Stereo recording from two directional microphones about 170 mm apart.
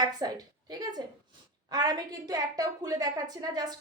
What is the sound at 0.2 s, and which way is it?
A woman's voice, 25° right (ahead or behind).